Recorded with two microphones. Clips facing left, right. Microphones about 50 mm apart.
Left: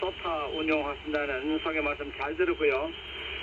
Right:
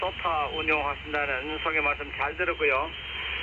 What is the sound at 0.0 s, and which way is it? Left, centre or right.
Speech, right.